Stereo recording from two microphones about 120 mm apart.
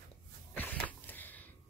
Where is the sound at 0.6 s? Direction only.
15° left (ahead or behind).